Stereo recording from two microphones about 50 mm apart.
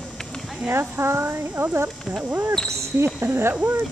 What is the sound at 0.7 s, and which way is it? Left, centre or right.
Speech, right.